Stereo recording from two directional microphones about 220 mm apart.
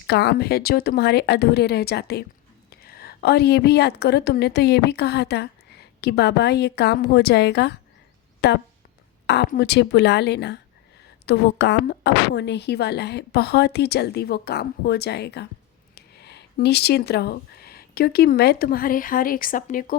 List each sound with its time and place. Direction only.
0.1 s a woman's voice: 50° left (ahead or behind)